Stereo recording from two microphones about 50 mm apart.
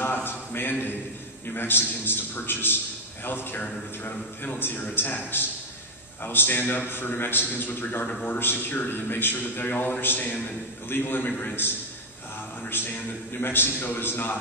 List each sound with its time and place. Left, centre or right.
0.0 s a sound: left
1.5 s a man's voice: left
12.6 s a man's voice: left